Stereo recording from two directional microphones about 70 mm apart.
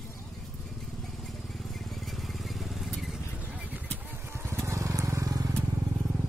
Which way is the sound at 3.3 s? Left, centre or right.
Left.